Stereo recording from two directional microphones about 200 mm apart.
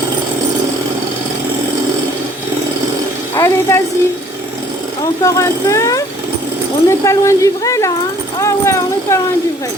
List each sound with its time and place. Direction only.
3.3 s a woman's voice: 15° left (ahead or behind)
5.2 s speech: 15° left (ahead or behind)
8.4 s a sound: 15° left (ahead or behind)